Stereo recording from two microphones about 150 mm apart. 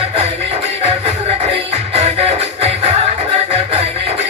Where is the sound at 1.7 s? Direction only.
45° right (ahead or behind).